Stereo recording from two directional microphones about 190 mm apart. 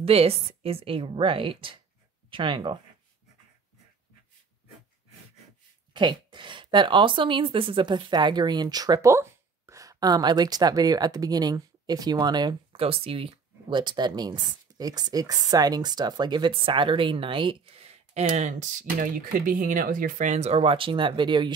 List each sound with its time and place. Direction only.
0.0 s speech: 30° right (ahead or behind)
5.9 s speech: 25° right (ahead or behind)